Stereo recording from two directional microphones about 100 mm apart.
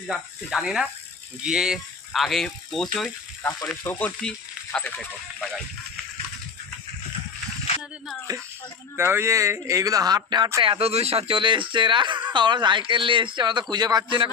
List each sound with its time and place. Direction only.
0.1 s speech: 5° right (ahead or behind)
3.8 s speech: 20° left (ahead or behind)
4.2 s sizzle: 10° left (ahead or behind)
4.9 s speech: 5° left (ahead or behind)
9.0 s speech: 25° right (ahead or behind); by 10.5 s 45° right (ahead or behind)
10.6 s speech: 70° right (ahead or behind); by 14.2 s 40° right (ahead or behind)